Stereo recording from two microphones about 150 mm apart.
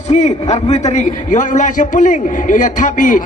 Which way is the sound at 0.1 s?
50° left (ahead or behind).